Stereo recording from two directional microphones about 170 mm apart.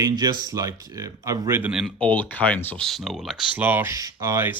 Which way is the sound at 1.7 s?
Centre (ahead or behind).